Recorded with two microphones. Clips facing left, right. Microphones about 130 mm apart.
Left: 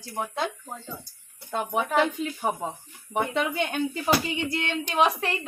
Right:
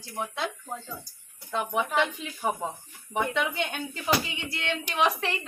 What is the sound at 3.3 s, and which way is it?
Speech, 40° left (ahead or behind).